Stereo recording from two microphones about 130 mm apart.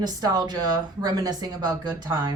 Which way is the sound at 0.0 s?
30° right (ahead or behind).